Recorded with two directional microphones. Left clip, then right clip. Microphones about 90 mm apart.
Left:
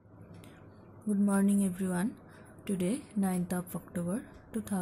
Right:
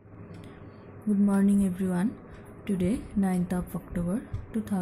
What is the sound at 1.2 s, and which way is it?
A woman's voice, 25° left (ahead or behind).